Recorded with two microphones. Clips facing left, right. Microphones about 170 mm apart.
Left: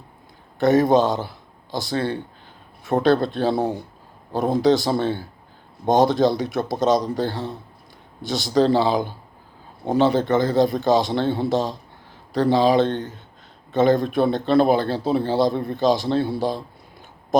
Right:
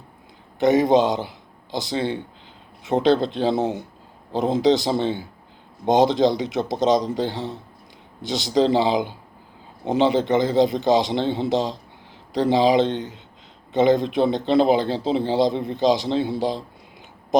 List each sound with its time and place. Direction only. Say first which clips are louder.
0.6 s a man's voice: even; 15° right (ahead or behind)